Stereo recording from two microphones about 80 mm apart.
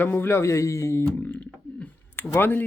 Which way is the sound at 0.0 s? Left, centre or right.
Left.